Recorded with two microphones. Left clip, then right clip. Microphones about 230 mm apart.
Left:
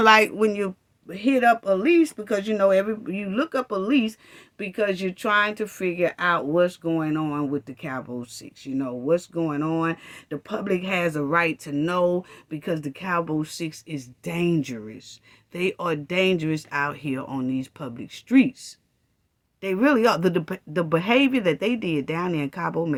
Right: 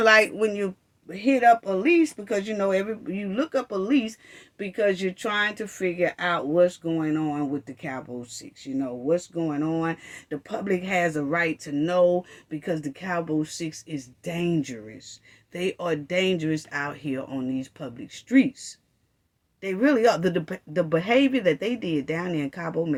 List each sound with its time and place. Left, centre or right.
0.0 s speech: left